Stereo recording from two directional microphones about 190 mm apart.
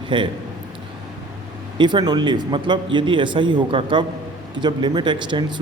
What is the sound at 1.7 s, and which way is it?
A man's voice, 25° right (ahead or behind).